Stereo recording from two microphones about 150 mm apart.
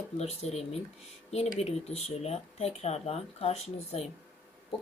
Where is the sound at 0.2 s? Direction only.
45° left (ahead or behind).